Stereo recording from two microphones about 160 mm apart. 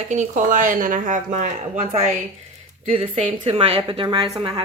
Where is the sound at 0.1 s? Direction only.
50° right (ahead or behind).